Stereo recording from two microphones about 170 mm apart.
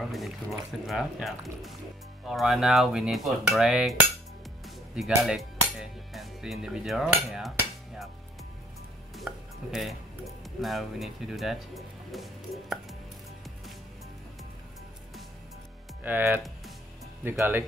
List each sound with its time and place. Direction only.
0.1 s cutlery: centre (ahead or behind)
4.6 s speech: centre (ahead or behind)
9.1 s chopping: centre (ahead or behind)
10.4 s speech: centre (ahead or behind)
16.0 s speech: 10° right (ahead or behind)